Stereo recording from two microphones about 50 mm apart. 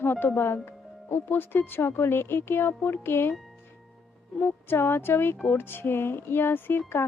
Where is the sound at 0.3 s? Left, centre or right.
Left.